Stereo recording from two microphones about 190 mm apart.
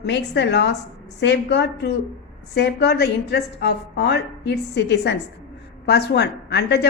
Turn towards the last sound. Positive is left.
turn(degrees=60)  # may be behind; listen again after turning